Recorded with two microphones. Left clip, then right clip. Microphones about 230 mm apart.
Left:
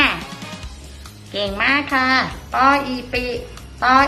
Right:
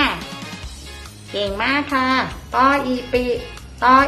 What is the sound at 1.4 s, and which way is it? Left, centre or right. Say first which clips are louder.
A woman's voice: left 2 dB; right.